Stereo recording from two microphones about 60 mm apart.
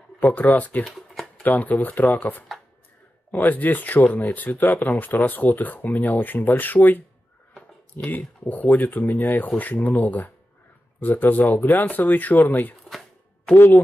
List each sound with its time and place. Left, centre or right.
0.2 s speech: left
0.8 s shuffling cards: centre
1.4 s speech: left
8.1 s speech: left